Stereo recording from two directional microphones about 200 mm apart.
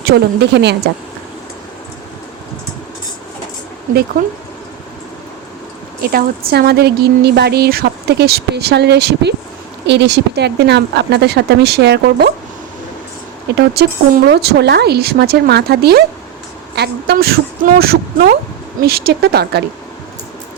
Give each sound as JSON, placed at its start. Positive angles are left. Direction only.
{"t": 0.1, "sound": "speech", "side_deg": -65}
{"t": 6.0, "sound": "speech", "side_deg": -50}
{"t": 13.6, "sound": "speech", "side_deg": -55}